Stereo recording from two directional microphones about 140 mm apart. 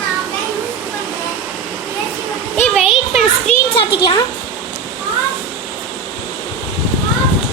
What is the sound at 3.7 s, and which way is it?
Speech, 35° left (ahead or behind).